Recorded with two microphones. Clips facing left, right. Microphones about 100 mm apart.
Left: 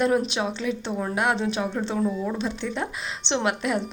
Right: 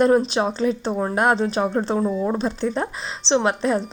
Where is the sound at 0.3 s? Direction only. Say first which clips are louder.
Right 6 dB; 40° right (ahead or behind).